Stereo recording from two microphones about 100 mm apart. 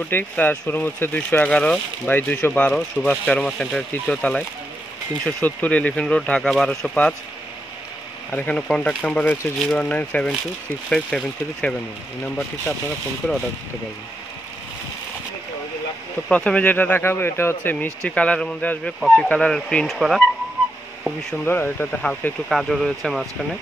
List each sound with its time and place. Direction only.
0.1 s speech: 20° left (ahead or behind)
8.3 s speech: 20° left (ahead or behind)
8.5 s speech: 10° left (ahead or behind)
13.2 s speech: 5° left (ahead or behind)
16.3 s speech: 10° left (ahead or behind)
18.0 s speech: 10° left (ahead or behind)
21.5 s speech: 20° left (ahead or behind)
22.5 s speech: centre (ahead or behind)